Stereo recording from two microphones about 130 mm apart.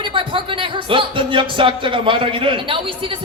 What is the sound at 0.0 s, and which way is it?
Speech, 40° right (ahead or behind).